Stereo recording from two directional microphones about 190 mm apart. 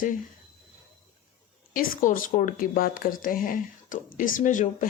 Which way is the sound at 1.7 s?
45° left (ahead or behind).